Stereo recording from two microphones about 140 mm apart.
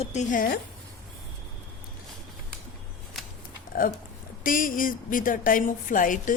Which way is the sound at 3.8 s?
85° left.